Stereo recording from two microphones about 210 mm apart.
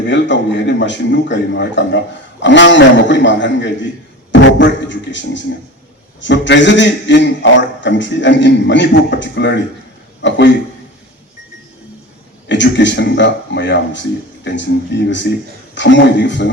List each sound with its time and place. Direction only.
0.1 s a man's voice: 60° left (ahead or behind)
12.5 s a man's voice: 60° left (ahead or behind)